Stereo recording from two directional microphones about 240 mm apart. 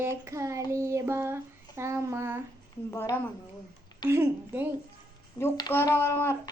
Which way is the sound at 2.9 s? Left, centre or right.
Centre.